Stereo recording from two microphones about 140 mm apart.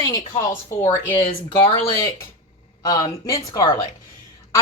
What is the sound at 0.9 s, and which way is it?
Speech, 35° left (ahead or behind).